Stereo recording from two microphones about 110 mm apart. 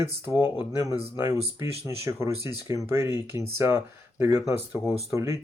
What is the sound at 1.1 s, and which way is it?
Speech, 25° right (ahead or behind).